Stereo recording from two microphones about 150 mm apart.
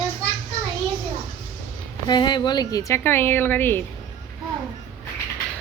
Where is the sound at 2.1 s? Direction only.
30° left (ahead or behind); by 3.8 s 15° left (ahead or behind).